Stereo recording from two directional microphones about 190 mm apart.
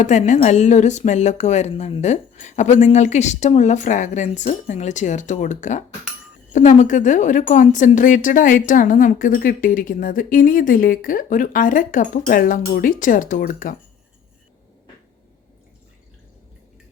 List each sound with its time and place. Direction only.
0.0 s a woman's voice: 40° left (ahead or behind)